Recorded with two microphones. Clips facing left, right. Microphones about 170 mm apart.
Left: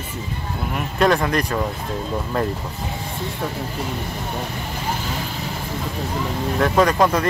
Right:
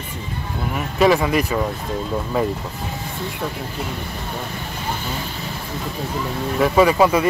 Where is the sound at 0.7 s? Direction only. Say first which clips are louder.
Right 2 dB; 5° right (ahead or behind).